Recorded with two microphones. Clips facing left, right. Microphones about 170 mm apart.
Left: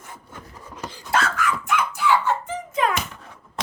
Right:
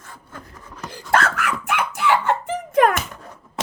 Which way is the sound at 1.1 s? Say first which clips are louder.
Right 2 dB; 65° right (ahead or behind).